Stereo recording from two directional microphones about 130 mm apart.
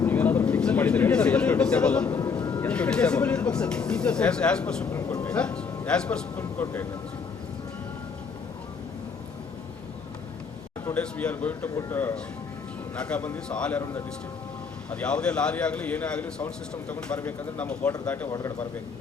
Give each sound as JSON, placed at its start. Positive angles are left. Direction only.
{"t": 0.0, "sound": "a sound", "side_deg": 15}
{"t": 2.0, "sound": "vehicle", "side_deg": 25}
{"t": 2.6, "sound": "speech", "side_deg": 10}
{"t": 4.9, "sound": "speech", "side_deg": 25}
{"t": 5.2, "sound": "speech", "side_deg": 10}
{"t": 10.8, "sound": "speech", "side_deg": 10}
{"t": 18.3, "sound": "speech", "side_deg": 25}